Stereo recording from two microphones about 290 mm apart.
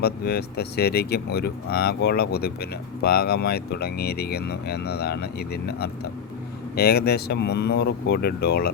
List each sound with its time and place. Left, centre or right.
0.0 s speech: left